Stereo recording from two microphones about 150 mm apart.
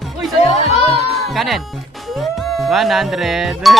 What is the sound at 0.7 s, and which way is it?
Music, 40° left (ahead or behind).